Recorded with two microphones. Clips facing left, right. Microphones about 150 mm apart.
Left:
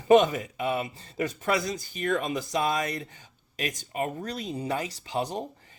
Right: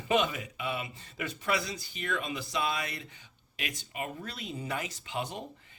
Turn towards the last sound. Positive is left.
turn(degrees=35)  # may be behind; listen again after turning